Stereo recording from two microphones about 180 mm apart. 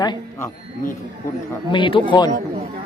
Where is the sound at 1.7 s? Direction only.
25° left (ahead or behind).